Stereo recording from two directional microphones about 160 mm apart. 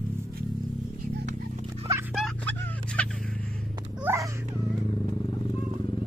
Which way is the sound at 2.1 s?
5° left (ahead or behind).